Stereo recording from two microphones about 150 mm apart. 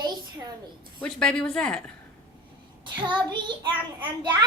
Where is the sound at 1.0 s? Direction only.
5° left (ahead or behind).